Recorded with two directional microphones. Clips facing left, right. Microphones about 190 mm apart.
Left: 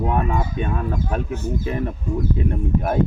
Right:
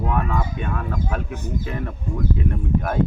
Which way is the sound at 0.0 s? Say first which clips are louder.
Left 2 dB; 25° left (ahead or behind).